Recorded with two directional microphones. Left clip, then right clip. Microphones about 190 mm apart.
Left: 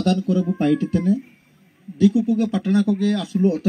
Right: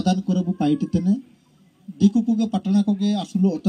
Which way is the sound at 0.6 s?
20° left (ahead or behind).